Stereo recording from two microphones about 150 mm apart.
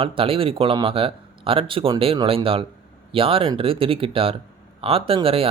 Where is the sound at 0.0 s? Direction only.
35° right (ahead or behind).